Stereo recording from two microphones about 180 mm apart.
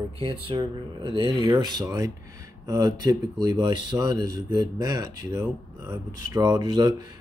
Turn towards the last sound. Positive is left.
turn(degrees=-25)  # may be behind; listen again after turning